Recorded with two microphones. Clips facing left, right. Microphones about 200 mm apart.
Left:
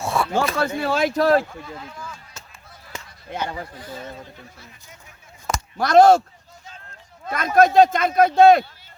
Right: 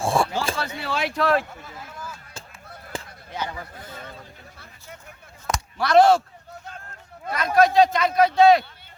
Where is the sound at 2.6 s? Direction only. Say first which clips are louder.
Right 5 dB; 60° right (ahead or behind).